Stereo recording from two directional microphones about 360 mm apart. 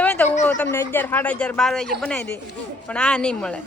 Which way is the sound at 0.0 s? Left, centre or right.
Centre.